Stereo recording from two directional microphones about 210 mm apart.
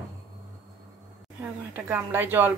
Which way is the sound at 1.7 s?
10° right (ahead or behind).